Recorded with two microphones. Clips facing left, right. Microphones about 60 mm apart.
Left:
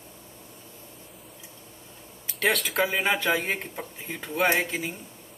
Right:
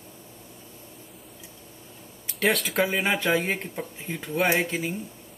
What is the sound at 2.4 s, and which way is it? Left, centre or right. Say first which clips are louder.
Speech: right 1 dB; centre.